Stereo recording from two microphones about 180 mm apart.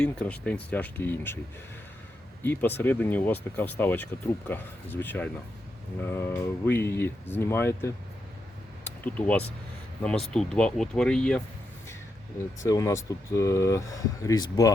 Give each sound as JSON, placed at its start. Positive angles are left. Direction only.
{"t": 0.0, "sound": "speech", "side_deg": 5}
{"t": 2.4, "sound": "speech", "side_deg": 10}
{"t": 8.8, "sound": "a sound", "side_deg": 10}
{"t": 10.0, "sound": "speech", "side_deg": 5}
{"t": 12.6, "sound": "speech", "side_deg": 15}